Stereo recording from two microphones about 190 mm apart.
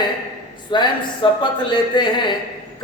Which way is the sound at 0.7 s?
25° left (ahead or behind).